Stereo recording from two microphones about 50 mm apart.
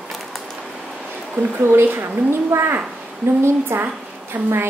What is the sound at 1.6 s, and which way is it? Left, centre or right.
A woman's voice, right.